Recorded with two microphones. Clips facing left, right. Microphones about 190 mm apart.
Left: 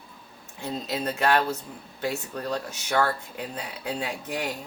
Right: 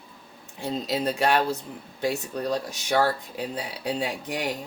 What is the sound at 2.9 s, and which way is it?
Speech, 35° right (ahead or behind).